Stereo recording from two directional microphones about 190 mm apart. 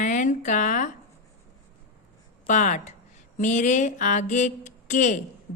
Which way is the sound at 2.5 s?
40° left (ahead or behind).